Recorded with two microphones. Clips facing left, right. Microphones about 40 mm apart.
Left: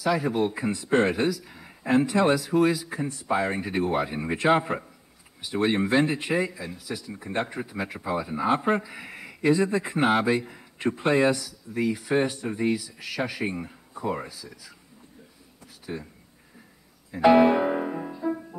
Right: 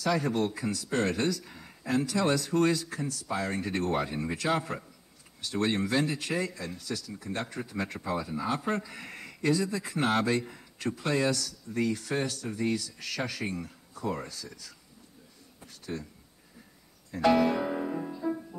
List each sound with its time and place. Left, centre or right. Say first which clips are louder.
0.0 s a man's voice: left 4 dB; centre
1.8 s speech: left 7 dB; left
2.3 s speech: left 4 dB; centre; by 8.8 s left
8.8 s a man's voice: left 3 dB; centre
10.8 s speech: left 7 dB; left
15.8 s speech: left 2 dB; centre
17.1 s music: left 7 dB; left